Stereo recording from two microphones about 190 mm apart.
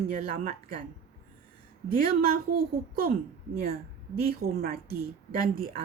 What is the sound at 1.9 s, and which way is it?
A woman's voice, 50° right (ahead or behind).